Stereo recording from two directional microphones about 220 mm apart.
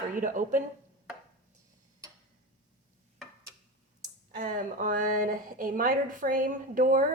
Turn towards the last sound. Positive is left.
turn(degrees=-40)  # may be behind; listen again after turning